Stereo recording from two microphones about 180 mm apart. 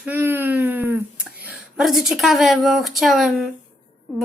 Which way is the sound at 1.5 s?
5° right (ahead or behind).